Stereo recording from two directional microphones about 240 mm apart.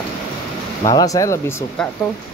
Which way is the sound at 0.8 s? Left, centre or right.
Centre.